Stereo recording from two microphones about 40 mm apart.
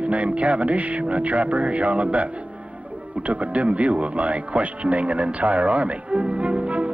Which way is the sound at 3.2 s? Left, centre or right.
Right.